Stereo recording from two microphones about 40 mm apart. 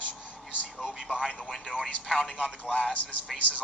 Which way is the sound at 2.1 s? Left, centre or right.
Left.